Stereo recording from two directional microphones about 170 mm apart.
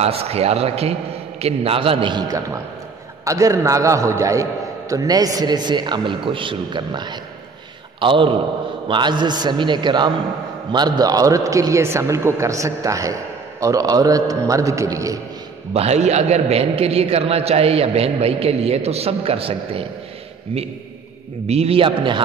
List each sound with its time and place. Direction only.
0.0 s a man's voice: 35° right (ahead or behind); by 15.1 s 20° right (ahead or behind)
15.7 s a man's voice: 40° right (ahead or behind)
21.5 s a man's voice: 35° right (ahead or behind)